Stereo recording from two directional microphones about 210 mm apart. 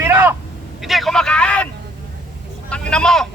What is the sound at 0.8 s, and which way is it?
Speech, centre (ahead or behind).